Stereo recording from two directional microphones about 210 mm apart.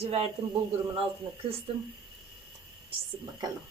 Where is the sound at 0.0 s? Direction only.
25° right (ahead or behind).